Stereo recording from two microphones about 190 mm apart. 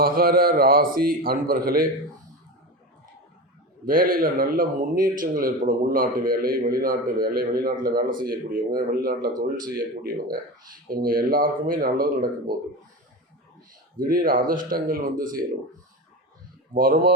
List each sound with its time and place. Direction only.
0.0 s a man's voice: 50° right (ahead or behind)
3.8 s a man's voice: 50° right (ahead or behind)
14.0 s a man's voice: 45° right (ahead or behind)
16.7 s a man's voice: 50° right (ahead or behind)